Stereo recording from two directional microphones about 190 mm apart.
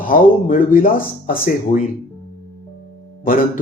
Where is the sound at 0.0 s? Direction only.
45° left (ahead or behind).